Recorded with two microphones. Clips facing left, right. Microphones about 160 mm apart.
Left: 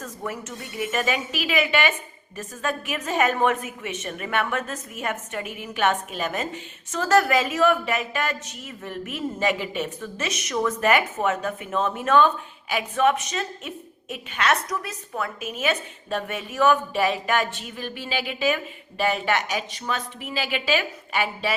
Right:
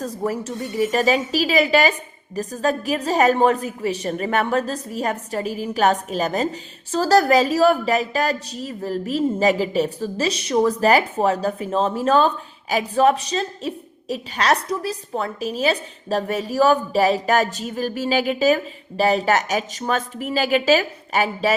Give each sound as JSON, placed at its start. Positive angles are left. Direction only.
{"t": 0.0, "sound": "a woman's voice", "side_deg": -35}